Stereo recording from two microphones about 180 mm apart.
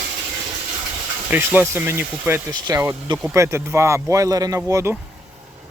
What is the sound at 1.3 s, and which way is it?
Speech, 10° right (ahead or behind).